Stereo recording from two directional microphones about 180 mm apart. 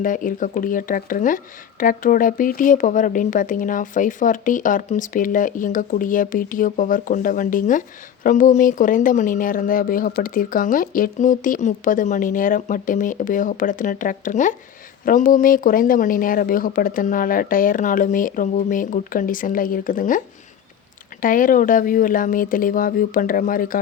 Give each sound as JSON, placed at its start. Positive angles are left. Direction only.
{"t": 0.0, "sound": "speech", "side_deg": 50}